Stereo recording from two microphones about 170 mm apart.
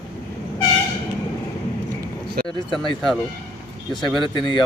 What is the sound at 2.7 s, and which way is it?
Speech, centre (ahead or behind).